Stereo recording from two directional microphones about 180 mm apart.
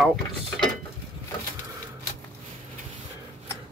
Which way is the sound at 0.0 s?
Centre (ahead or behind).